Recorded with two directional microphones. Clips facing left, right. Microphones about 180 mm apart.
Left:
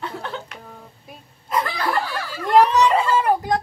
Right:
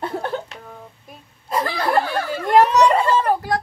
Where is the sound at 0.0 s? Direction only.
45° right (ahead or behind).